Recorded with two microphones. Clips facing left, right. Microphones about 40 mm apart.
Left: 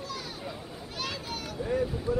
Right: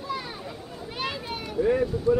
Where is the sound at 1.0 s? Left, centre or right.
Right.